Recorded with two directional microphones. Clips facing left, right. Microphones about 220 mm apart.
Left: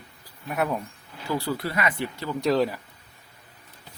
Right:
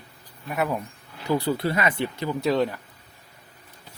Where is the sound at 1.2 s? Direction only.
20° right (ahead or behind).